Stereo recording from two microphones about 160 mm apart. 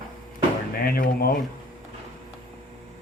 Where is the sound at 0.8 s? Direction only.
65° left (ahead or behind).